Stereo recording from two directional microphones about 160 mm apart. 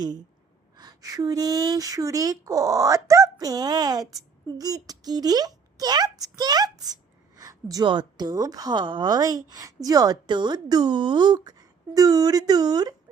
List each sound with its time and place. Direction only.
0.8 s speech: 25° right (ahead or behind)